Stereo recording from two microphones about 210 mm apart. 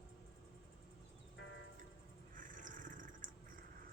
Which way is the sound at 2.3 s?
40° right (ahead or behind).